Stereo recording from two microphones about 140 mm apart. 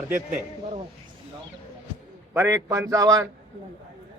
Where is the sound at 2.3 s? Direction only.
20° right (ahead or behind).